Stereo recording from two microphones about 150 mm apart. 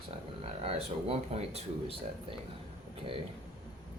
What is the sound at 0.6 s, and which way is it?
Speech, 40° right (ahead or behind).